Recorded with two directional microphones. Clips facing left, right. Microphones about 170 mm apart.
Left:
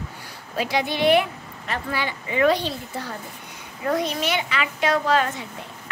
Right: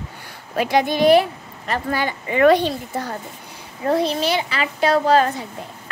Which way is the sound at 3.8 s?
30° right (ahead or behind).